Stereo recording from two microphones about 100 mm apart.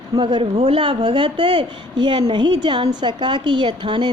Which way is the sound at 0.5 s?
80° right.